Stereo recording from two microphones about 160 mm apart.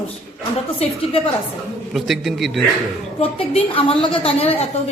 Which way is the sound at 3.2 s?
35° left (ahead or behind).